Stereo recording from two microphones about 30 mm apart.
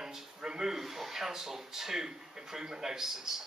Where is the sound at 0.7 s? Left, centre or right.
Centre.